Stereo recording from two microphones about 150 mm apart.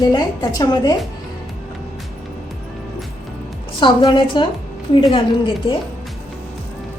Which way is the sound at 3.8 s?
35° left (ahead or behind).